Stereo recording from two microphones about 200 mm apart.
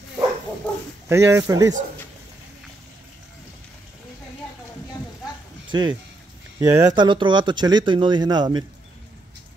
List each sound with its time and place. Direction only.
1.0 s speech: 15° right (ahead or behind)
5.7 s speech: 20° right (ahead or behind)